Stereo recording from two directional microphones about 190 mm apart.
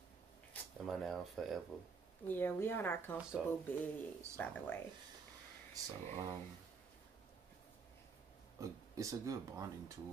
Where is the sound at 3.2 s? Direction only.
5° right (ahead or behind).